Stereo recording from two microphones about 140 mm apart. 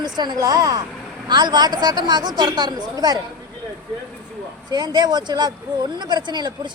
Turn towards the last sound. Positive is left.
turn(degrees=-30)  # may be behind; listen again after turning